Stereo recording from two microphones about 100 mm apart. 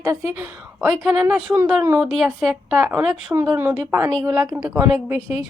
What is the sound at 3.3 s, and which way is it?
A woman's voice, 30° right (ahead or behind).